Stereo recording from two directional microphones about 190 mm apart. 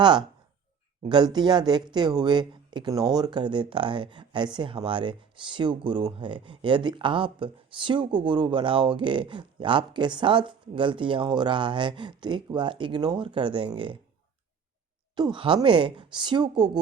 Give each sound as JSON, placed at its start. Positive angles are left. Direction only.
{"t": 0.0, "sound": "speech", "side_deg": -25}
{"t": 15.1, "sound": "speech", "side_deg": -25}